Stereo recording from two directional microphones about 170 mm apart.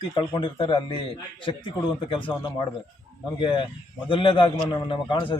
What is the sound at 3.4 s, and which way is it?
Speech, 30° left (ahead or behind).